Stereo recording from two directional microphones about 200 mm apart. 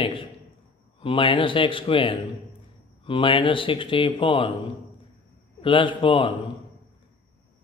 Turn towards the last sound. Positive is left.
turn(degrees=25)  # may be behind; listen again after turning